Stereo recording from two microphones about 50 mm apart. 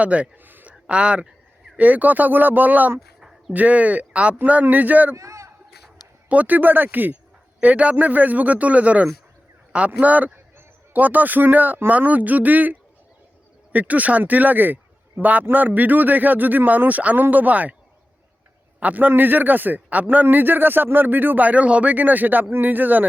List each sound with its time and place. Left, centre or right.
0.0 s a man's voice: right
0.4 s a sound: right
0.7 s speech: right
3.2 s a sound: centre
3.5 s a man's voice: right
5.1 s a sound: right
6.2 s a man's voice: right
13.7 s speech: right
18.8 s speech: right